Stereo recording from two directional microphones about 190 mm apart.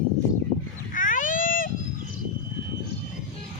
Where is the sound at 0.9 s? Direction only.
45° left (ahead or behind).